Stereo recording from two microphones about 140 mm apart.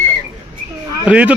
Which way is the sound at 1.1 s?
10° right (ahead or behind).